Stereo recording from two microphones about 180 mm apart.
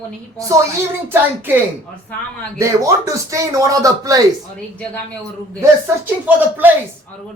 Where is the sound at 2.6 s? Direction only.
15° right (ahead or behind).